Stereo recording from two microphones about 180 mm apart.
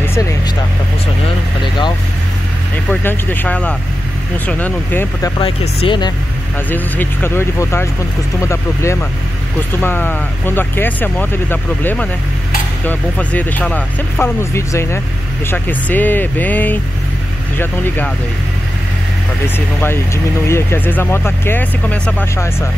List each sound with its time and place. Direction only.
0.0 s vehicle: 15° left (ahead or behind)
1.6 s vehicle: 25° left (ahead or behind)
2.9 s speech: 10° left (ahead or behind)
5.4 s speech: 30° left (ahead or behind)
6.7 s speech: 10° left (ahead or behind)
19.4 s speech: 10° left (ahead or behind)